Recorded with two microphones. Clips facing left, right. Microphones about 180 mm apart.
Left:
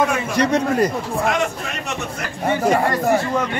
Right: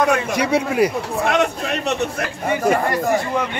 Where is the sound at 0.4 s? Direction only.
10° right (ahead or behind).